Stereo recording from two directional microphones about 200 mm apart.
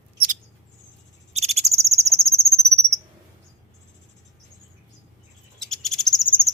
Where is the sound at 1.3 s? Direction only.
30° right (ahead or behind).